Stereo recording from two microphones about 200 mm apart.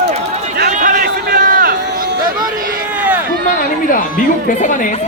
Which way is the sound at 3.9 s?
40° left (ahead or behind).